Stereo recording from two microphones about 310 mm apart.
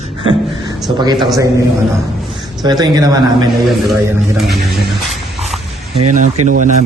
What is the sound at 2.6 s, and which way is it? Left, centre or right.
Speech, centre.